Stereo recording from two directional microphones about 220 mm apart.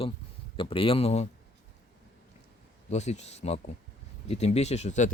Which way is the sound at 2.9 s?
30° left (ahead or behind).